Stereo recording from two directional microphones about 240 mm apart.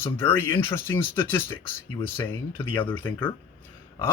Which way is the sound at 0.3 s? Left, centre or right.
Centre.